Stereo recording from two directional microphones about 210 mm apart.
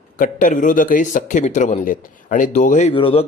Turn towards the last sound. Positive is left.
turn(degrees=25)  # may be behind; listen again after turning